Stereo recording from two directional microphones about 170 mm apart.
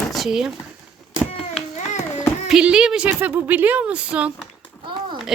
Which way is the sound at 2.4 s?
5° right (ahead or behind).